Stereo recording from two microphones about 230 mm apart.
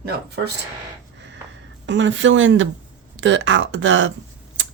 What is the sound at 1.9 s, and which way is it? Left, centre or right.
Speech, right.